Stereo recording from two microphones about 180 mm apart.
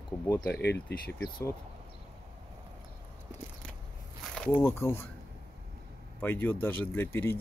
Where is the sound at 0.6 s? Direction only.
65° left (ahead or behind).